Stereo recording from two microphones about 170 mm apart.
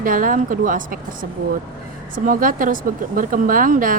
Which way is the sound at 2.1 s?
55° right (ahead or behind).